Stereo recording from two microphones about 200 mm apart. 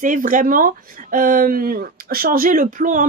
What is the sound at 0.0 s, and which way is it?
Speech, 40° right (ahead or behind).